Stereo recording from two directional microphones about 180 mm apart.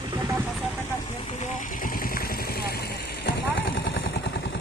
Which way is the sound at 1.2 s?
40° left (ahead or behind).